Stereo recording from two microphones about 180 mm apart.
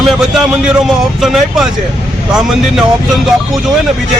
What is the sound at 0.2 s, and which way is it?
A man's voice, 5° right (ahead or behind).